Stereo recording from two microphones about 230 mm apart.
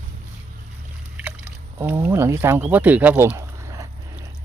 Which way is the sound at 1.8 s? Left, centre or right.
Centre.